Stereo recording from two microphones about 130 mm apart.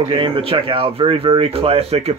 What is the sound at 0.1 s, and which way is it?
Speech, 45° right (ahead or behind).